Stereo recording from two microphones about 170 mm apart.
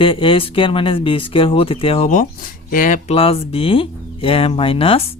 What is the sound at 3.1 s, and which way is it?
Speech, 35° left (ahead or behind).